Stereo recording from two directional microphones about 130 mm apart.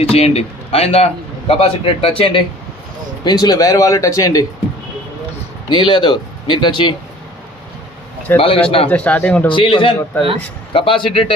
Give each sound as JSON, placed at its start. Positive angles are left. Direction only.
{"t": 0.0, "sound": "speech", "side_deg": 50}
{"t": 3.2, "sound": "speech", "side_deg": 30}
{"t": 5.6, "sound": "speech", "side_deg": 35}
{"t": 8.4, "sound": "speech", "side_deg": 45}
{"t": 8.9, "sound": "speech", "side_deg": 10}
{"t": 9.5, "sound": "speech", "side_deg": 40}
{"t": 10.1, "sound": "speech", "side_deg": 15}
{"t": 10.7, "sound": "speech", "side_deg": 40}